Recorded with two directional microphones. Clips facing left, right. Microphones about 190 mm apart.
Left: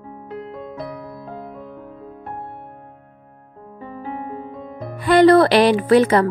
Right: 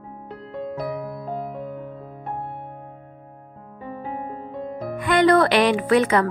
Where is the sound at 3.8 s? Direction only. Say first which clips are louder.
Left 1 dB; centre (ahead or behind).